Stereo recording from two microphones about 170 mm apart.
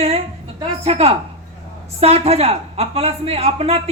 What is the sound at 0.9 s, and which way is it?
A woman's voice, 35° right (ahead or behind).